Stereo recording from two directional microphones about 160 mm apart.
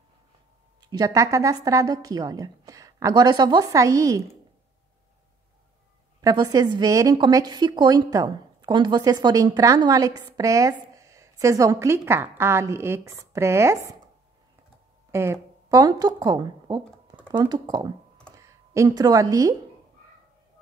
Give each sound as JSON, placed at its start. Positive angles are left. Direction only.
{"t": 0.7, "sound": "a woman's voice", "side_deg": -25}
{"t": 6.2, "sound": "a woman's voice", "side_deg": -25}
{"t": 15.0, "sound": "a woman's voice", "side_deg": -15}